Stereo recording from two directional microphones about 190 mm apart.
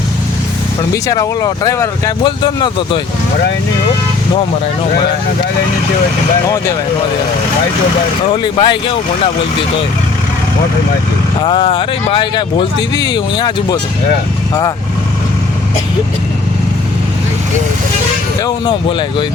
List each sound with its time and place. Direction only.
1.0 s speech: 20° left (ahead or behind)
8.3 s speech: 25° left (ahead or behind)
11.4 s speech: 25° left (ahead or behind)
18.4 s speech: 25° left (ahead or behind)